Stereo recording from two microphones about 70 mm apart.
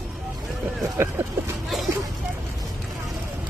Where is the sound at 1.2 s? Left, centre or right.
Right.